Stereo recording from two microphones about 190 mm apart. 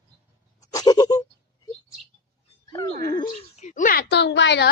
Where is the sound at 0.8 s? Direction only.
20° left (ahead or behind).